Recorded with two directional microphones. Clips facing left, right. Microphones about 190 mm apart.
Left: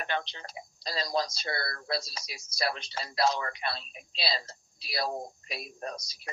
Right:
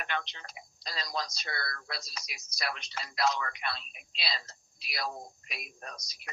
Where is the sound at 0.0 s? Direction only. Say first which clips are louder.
Left 3 dB; 30° left (ahead or behind).